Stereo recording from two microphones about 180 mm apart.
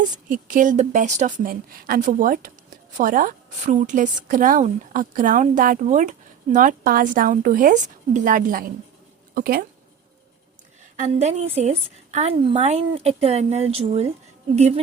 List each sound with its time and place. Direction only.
0.3 s a woman's voice: 50° right (ahead or behind)
10.9 s a woman's voice: 40° right (ahead or behind)